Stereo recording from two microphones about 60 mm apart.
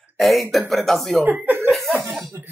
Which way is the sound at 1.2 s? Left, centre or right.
Right.